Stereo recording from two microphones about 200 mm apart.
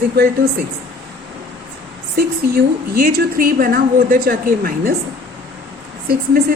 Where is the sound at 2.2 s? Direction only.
45° right (ahead or behind).